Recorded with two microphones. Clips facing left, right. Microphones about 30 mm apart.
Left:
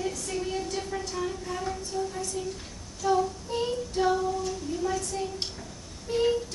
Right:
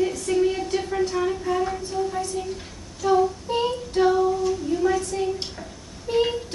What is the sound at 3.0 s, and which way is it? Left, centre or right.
Child singing, right.